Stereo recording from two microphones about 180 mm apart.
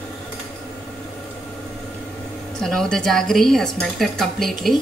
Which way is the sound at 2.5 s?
Centre (ahead or behind).